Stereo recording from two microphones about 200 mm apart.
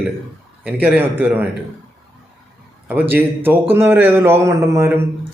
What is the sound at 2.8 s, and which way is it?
A man's voice, 10° right (ahead or behind).